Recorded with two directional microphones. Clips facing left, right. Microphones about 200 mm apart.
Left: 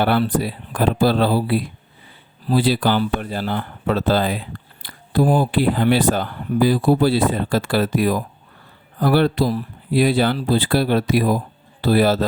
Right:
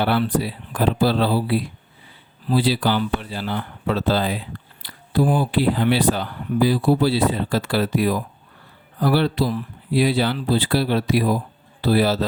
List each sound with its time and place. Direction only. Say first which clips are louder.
0.0 s speech: left 2 dB; 50° left (ahead or behind)